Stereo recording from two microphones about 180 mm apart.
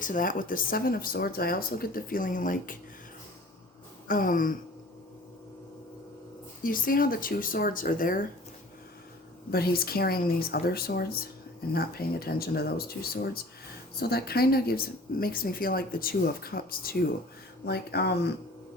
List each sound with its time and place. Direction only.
0.0 s speech: 50° left (ahead or behind)
4.1 s speech: 50° left (ahead or behind)
6.6 s speech: 50° left (ahead or behind)
9.5 s speech: 60° left (ahead or behind)